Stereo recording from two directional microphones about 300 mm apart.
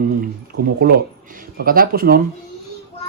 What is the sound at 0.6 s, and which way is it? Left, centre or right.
Speech, right.